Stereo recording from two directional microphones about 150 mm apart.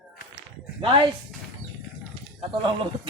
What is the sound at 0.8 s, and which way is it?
Speech, 30° right (ahead or behind).